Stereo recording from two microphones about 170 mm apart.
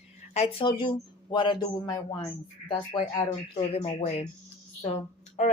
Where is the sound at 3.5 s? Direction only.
35° left (ahead or behind).